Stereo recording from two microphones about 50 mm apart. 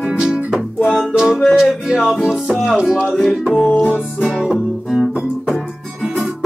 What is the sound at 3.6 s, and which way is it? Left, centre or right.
Music, left.